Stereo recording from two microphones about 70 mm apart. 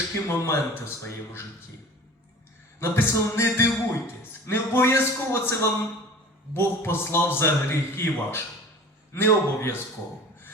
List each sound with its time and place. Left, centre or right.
0.3 s a man's voice: left
2.8 s a man's voice: left